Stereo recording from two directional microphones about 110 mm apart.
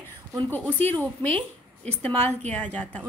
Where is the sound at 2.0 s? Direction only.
75° right (ahead or behind).